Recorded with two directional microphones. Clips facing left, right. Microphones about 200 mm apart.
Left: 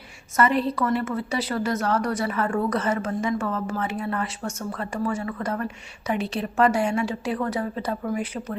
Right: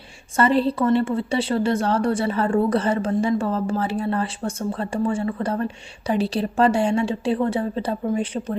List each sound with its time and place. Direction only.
0.3 s a woman's voice: 30° right (ahead or behind)